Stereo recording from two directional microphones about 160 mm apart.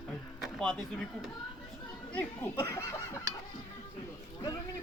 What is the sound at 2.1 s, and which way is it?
Speech, 15° left (ahead or behind).